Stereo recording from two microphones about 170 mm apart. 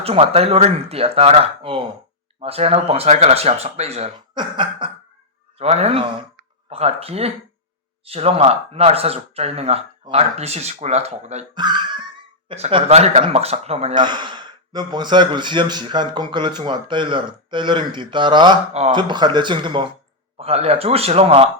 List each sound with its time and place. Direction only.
0.0 s speech: 35° right (ahead or behind)
11.5 s cough: 25° right (ahead or behind)
12.5 s speech: 40° right (ahead or behind)
18.7 s speech: 40° right (ahead or behind)
18.9 s speech: 25° right (ahead or behind)